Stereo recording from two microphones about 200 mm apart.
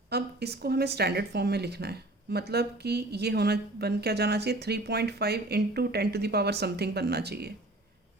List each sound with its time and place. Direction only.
0.1 s speech: 55° right (ahead or behind)